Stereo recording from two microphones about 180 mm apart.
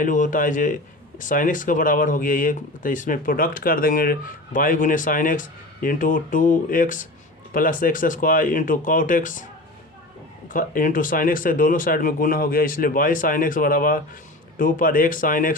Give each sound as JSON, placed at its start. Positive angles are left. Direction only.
{"t": 0.0, "sound": "speech", "side_deg": 45}
{"t": 10.5, "sound": "speech", "side_deg": 50}